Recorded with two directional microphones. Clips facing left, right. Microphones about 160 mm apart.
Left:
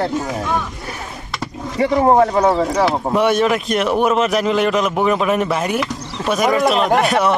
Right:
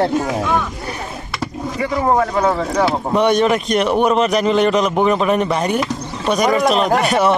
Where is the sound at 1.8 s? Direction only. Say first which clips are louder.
Left 4 dB; 30° left (ahead or behind).